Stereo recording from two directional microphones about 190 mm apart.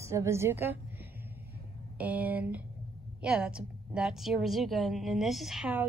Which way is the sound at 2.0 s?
10° right (ahead or behind).